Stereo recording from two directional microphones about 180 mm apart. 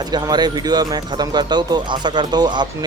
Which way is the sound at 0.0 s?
20° right (ahead or behind).